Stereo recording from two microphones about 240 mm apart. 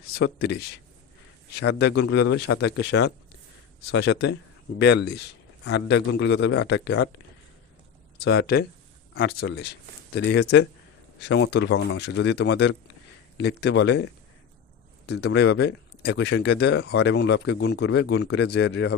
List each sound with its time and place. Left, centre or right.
0.1 s speech: left
8.2 s speech: left
15.0 s speech: left